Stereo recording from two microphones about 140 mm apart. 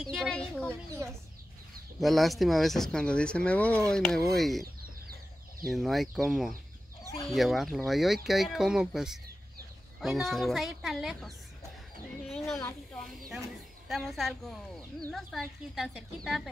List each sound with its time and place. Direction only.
0.0 s speech: centre (ahead or behind)
0.8 s a child's voice: 20° right (ahead or behind)
2.0 s speech: centre (ahead or behind)
5.7 s speech: centre (ahead or behind)